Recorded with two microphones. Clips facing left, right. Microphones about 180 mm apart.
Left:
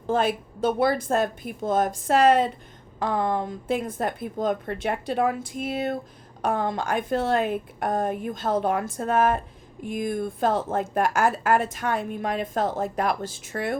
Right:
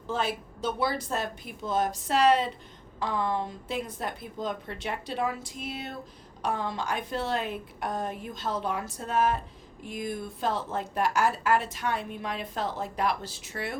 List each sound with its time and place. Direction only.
0.1 s a woman's voice: 50° left (ahead or behind)